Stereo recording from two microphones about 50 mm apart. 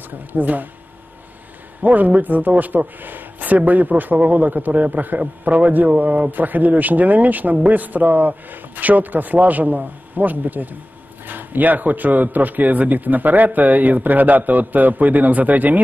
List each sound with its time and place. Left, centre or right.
0.3 s a man's voice: right
1.8 s a man's voice: right